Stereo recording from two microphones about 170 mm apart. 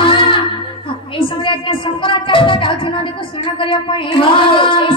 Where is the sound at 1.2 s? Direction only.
30° left (ahead or behind).